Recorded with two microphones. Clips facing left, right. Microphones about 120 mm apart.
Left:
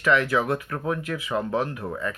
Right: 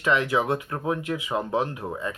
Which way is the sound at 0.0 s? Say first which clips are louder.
Left 1 dB; 20° right (ahead or behind).